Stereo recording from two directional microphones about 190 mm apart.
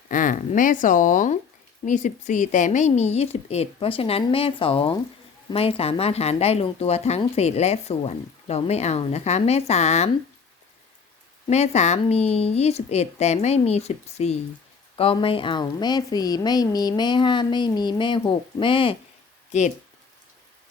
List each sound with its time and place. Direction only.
0.1 s speech: 45° left (ahead or behind)
11.4 s a woman's voice: 35° left (ahead or behind)